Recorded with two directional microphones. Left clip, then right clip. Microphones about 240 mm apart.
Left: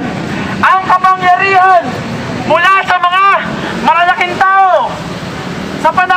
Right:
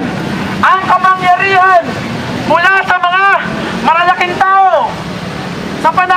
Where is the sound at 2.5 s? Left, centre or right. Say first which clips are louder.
Left 1 dB; centre.